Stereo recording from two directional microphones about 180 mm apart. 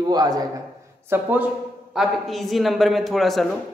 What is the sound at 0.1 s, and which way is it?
Speech, 20° right (ahead or behind).